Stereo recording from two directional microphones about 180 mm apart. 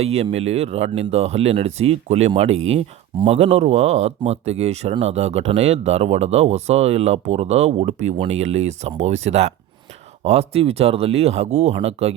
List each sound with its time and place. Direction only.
0.0 s speech: 35° right (ahead or behind)